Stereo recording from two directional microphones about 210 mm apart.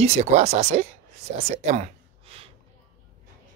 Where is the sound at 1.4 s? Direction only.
30° right (ahead or behind).